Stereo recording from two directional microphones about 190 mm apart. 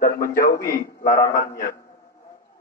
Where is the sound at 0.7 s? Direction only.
45° left (ahead or behind).